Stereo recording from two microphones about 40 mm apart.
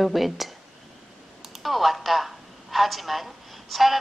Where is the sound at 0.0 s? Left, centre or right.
Centre.